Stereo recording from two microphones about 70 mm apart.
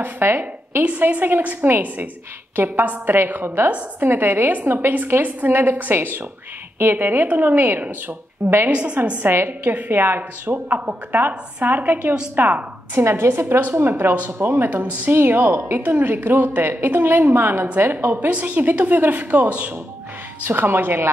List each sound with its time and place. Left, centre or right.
0.0 s a woman's voice: right
0.8 s a woman's voice: right
9.3 s a woman's voice: right
13.0 s a woman's voice: right
20.4 s a woman's voice: right